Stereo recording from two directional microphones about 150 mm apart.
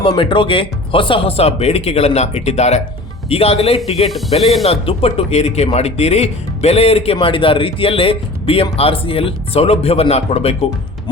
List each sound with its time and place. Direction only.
0.1 s speech: 35° left (ahead or behind)